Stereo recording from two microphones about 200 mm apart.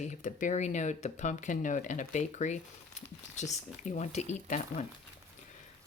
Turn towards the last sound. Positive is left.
turn(degrees=35)  # may be behind; listen again after turning